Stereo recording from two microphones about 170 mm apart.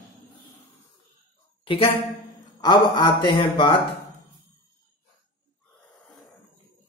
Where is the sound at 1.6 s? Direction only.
30° left (ahead or behind).